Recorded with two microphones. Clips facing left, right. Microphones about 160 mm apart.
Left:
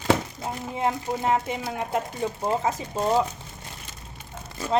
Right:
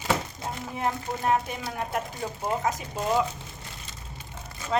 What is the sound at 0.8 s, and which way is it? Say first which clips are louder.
Speech: left 3 dB; 20° left (ahead or behind).